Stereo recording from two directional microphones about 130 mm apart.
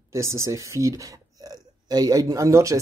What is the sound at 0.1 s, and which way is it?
Speech, 20° right (ahead or behind).